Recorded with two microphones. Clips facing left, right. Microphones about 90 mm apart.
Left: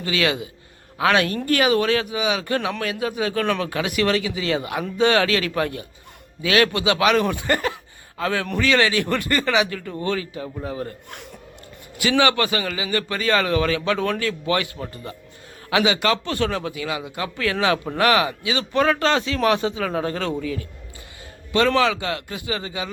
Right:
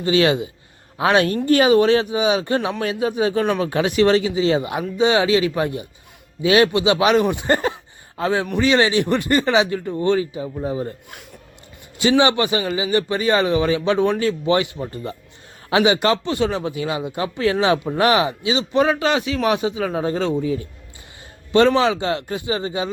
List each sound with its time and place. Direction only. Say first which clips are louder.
0.0 s speech: right 6 dB; 30° right (ahead or behind)
11.9 s a man's voice: right 3 dB; 25° right (ahead or behind)
21.7 s speech: right 2 dB; 25° right (ahead or behind)